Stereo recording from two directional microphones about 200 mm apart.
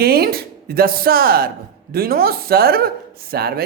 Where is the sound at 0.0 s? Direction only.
50° right (ahead or behind).